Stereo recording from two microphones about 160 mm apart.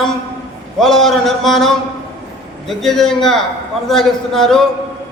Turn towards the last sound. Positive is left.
turn(degrees=0)  # may be behind; listen again after turning